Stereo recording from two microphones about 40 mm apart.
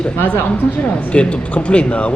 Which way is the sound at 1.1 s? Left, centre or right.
Left.